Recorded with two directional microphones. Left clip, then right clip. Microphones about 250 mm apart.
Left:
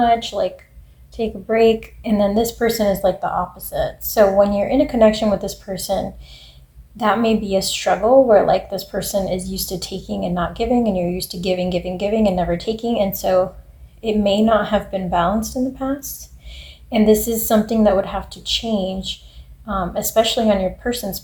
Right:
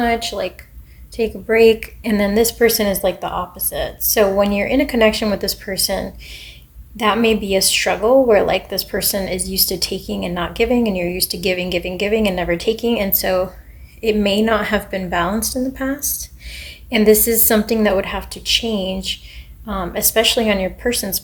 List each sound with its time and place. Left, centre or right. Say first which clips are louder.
0.0 s a woman's voice: left 2 dB; right